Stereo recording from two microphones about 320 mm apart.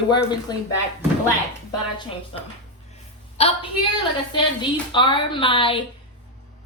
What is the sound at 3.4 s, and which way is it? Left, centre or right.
Speech, centre.